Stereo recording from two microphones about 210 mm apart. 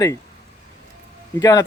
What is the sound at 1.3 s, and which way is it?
Speech, 20° left (ahead or behind).